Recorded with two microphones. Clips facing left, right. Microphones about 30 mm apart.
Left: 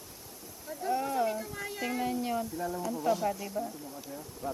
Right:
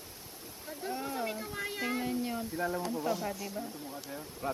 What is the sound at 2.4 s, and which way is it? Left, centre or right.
Speech, right.